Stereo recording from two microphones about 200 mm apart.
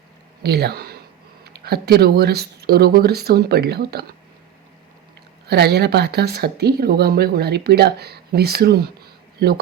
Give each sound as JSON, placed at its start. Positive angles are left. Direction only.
{"t": 0.4, "sound": "speech", "side_deg": -55}
{"t": 5.5, "sound": "speech", "side_deg": -55}